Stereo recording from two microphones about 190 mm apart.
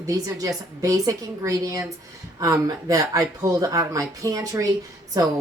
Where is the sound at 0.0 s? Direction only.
20° right (ahead or behind).